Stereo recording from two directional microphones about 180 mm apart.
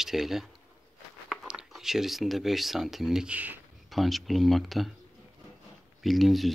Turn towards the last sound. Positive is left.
turn(degrees=0)  # may be behind; listen again after turning